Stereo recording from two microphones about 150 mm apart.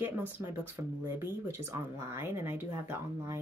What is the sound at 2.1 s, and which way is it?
Speech, 15° right (ahead or behind).